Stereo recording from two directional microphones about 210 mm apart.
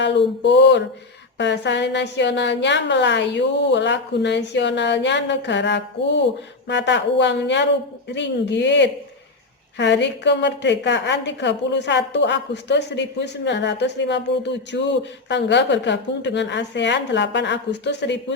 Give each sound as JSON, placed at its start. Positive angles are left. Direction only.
{"t": 0.0, "sound": "a woman's voice", "side_deg": 55}